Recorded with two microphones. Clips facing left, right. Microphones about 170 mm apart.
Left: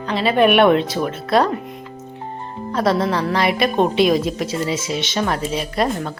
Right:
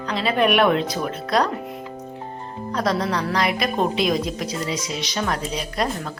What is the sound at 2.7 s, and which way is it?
Speech, 25° left (ahead or behind).